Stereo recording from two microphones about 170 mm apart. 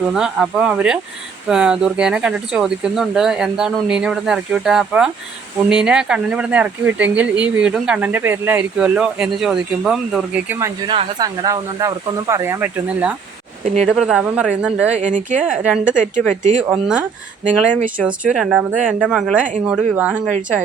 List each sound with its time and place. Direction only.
0.1 s speech: 5° right (ahead or behind)
10.8 s speech: 25° right (ahead or behind); by 14.9 s 5° right (ahead or behind)
14.9 s speech: 45° right (ahead or behind)
15.5 s speech: 5° right (ahead or behind)
16.3 s speech: 45° right (ahead or behind)
16.6 s speech: 10° right (ahead or behind)
17.4 s speech: 50° right (ahead or behind)
18.0 s speech: 5° right (ahead or behind)